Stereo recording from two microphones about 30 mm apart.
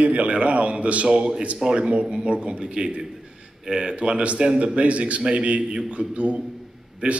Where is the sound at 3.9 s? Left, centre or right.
Right.